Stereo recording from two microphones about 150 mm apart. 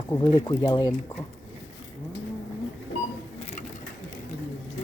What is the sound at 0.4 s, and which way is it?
Speech, 25° left (ahead or behind).